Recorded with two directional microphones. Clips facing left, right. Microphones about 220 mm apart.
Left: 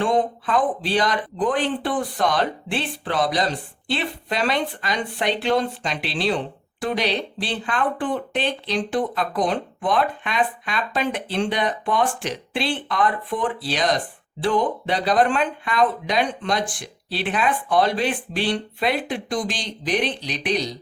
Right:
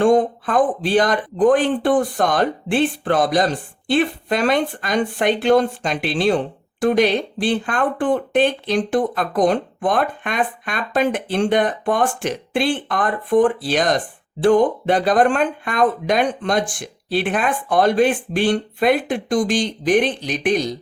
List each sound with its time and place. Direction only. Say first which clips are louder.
0.0 s speech: right 6 dB; 45° right (ahead or behind)